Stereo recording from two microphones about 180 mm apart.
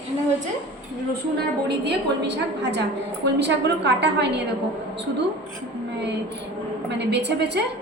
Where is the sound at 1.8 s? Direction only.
70° right (ahead or behind).